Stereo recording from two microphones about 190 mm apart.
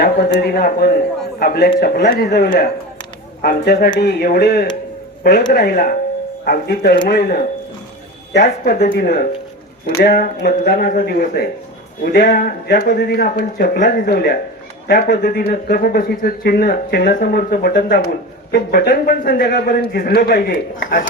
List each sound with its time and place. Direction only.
0.0 s a man's voice: 55° left (ahead or behind)